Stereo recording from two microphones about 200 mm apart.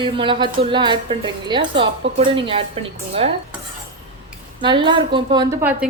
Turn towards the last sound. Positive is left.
turn(degrees=-15)  # may be behind; listen again after turning